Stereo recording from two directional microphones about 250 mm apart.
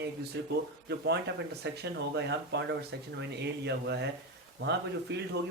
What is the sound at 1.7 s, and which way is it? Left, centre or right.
Speech, right.